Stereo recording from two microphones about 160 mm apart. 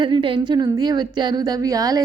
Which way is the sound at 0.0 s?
30° right (ahead or behind).